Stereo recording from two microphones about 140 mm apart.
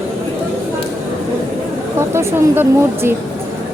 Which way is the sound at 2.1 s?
20° right (ahead or behind).